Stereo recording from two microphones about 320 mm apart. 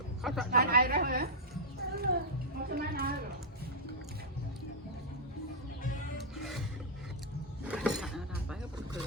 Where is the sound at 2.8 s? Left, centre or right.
Right.